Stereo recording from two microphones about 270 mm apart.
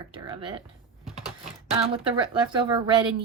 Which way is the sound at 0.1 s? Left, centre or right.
Centre.